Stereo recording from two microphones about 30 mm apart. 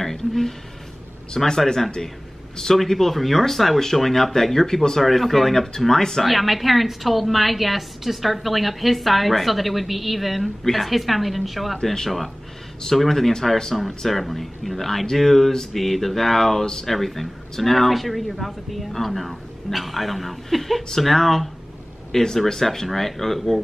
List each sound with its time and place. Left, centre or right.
0.0 s a sound: centre
1.4 s a woman's voice: centre
5.0 s a woman's voice: centre
6.2 s a woman's voice: centre
11.8 s speech: centre
12.9 s a woman's voice: centre
22.1 s speech: centre